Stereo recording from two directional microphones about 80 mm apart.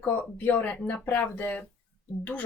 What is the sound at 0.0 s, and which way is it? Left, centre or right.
Speech, left.